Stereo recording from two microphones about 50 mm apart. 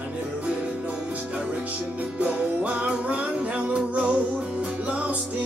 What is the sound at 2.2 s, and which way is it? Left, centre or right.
Music, right.